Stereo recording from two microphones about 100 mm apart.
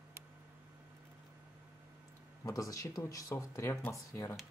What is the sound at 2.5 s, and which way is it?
Speech, 35° left (ahead or behind).